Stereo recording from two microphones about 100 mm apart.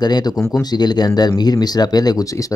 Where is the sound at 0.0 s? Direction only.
40° left (ahead or behind).